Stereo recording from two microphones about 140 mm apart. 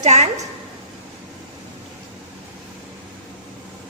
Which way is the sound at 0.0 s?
55° right (ahead or behind).